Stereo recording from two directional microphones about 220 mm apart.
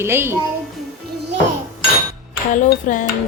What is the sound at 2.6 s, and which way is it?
Dishes, 35° left (ahead or behind).